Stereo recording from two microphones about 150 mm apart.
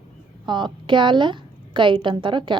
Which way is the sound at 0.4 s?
30° right (ahead or behind).